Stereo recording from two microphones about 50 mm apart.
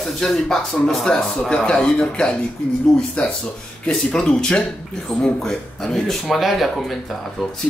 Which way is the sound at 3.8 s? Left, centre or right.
Centre.